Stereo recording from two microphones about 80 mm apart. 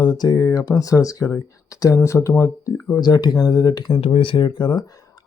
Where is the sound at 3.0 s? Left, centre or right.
Left.